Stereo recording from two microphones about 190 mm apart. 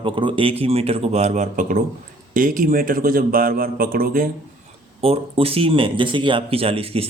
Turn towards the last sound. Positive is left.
turn(degrees=-30)  # may be behind; listen again after turning